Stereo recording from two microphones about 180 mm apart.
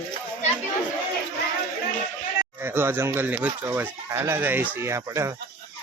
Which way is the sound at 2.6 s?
15° right (ahead or behind).